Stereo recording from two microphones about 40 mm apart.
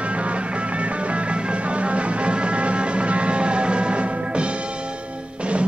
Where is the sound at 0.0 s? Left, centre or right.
Right.